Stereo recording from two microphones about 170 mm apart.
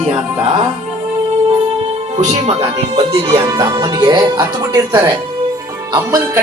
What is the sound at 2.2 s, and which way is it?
Speech, 40° right (ahead or behind).